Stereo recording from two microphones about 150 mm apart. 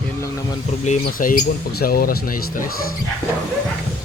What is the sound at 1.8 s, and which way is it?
Speech, 75° left (ahead or behind).